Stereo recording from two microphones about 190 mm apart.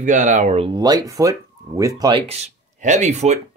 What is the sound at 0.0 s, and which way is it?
Speech, 40° right (ahead or behind).